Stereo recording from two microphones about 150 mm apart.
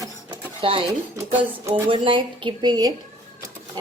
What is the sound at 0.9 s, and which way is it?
Speech, 20° right (ahead or behind).